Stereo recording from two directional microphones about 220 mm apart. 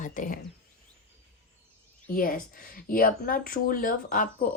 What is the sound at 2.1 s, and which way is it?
Speech, 40° left (ahead or behind).